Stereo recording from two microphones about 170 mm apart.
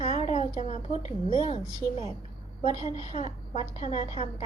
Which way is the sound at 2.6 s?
35° left (ahead or behind).